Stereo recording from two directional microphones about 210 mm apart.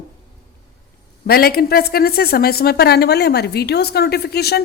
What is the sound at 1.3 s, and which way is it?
A woman's voice, 45° left (ahead or behind).